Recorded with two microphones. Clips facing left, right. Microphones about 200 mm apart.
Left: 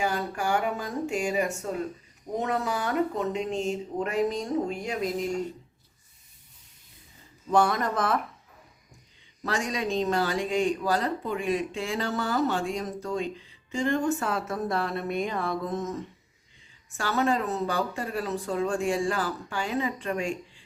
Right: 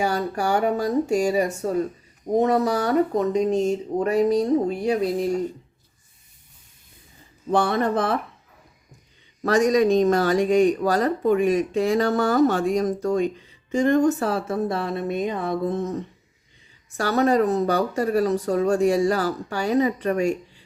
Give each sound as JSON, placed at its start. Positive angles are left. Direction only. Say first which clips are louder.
{"t": 0.0, "sound": "speech", "louder": "right 5 dB", "side_deg": -40}
{"t": 7.4, "sound": "speech", "louder": "right 3 dB", "side_deg": -30}
{"t": 9.4, "sound": "speech", "louder": "right 12 dB", "side_deg": -45}
{"t": 15.7, "sound": "speech", "louder": "right 5 dB", "side_deg": -30}